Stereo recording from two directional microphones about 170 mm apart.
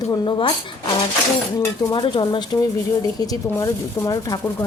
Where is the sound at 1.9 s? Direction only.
25° left (ahead or behind).